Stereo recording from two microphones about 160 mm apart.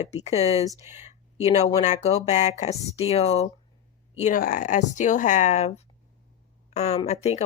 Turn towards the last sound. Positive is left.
turn(degrees=40)  # may be behind; listen again after turning